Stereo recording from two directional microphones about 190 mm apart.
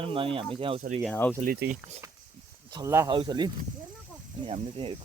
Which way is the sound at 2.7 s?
20° right (ahead or behind).